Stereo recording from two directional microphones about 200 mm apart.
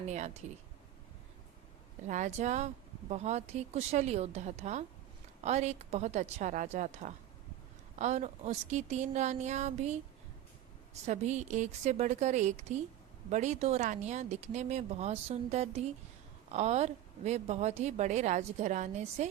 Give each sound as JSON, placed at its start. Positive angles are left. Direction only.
{"t": 0.0, "sound": "a woman's voice", "side_deg": -35}
{"t": 2.0, "sound": "a woman's voice", "side_deg": -40}
{"t": 11.0, "sound": "a woman's voice", "side_deg": -35}